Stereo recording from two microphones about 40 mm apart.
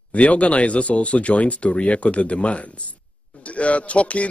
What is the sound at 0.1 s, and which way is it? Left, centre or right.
A man's voice, left.